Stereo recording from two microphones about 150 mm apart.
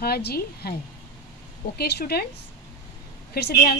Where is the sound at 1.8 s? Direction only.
90° left.